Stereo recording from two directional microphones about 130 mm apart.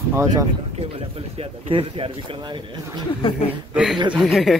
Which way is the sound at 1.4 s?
45° right (ahead or behind).